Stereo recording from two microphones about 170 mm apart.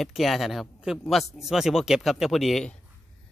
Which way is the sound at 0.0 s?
Centre (ahead or behind).